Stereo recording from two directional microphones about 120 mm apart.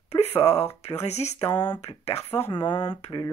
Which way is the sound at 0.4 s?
60° left (ahead or behind).